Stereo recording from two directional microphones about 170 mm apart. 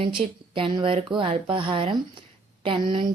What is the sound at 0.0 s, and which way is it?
A woman's voice, 30° right (ahead or behind).